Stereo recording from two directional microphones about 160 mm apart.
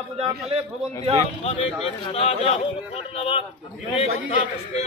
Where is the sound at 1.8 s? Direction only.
35° left (ahead or behind).